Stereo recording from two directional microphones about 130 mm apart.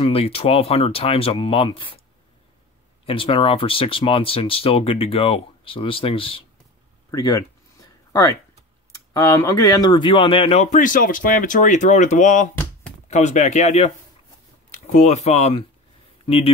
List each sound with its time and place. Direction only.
0.0 s speech: 50° left (ahead or behind)
3.1 s speech: 45° left (ahead or behind)
7.1 s a sound: 25° left (ahead or behind)
9.1 s speech: 25° left (ahead or behind)
9.8 s speech: 40° left (ahead or behind)
10.7 s speech: 90° left; by 16.5 s 50° left (ahead or behind)